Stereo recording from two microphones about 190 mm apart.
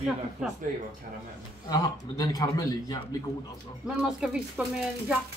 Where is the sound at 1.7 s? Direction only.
20° left (ahead or behind).